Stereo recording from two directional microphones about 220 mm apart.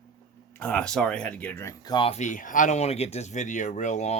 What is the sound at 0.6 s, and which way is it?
Speech, 5° left (ahead or behind).